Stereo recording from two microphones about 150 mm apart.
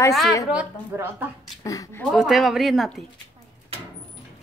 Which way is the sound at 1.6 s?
25° left (ahead or behind).